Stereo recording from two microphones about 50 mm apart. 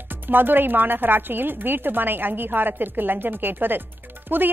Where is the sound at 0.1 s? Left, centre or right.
Right.